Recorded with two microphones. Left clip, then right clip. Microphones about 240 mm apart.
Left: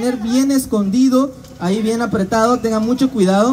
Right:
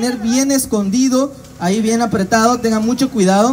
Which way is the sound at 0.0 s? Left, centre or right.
Right.